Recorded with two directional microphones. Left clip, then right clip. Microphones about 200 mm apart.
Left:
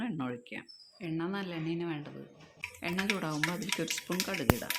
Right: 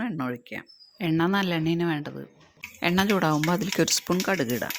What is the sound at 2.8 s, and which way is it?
Speech, 45° right (ahead or behind).